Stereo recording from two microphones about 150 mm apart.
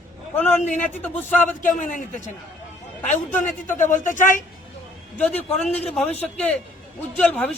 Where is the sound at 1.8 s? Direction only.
60° left (ahead or behind).